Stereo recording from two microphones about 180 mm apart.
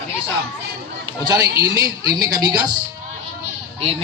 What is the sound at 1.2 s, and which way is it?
A man's voice, 20° right (ahead or behind).